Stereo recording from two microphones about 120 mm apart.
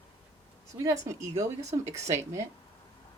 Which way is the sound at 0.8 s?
30° right (ahead or behind).